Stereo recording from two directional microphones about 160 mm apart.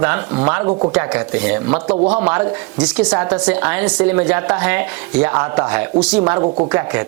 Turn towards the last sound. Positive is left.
turn(degrees=-10)  # may be behind; listen again after turning